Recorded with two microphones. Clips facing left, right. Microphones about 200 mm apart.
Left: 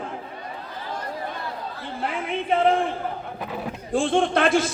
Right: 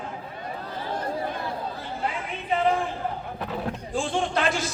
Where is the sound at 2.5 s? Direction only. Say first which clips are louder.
Left 3 dB; 55° left (ahead or behind).